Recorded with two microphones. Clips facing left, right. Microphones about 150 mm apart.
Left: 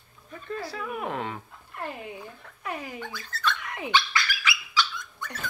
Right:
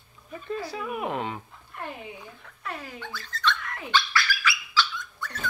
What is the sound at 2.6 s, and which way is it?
Dog, 10° left (ahead or behind).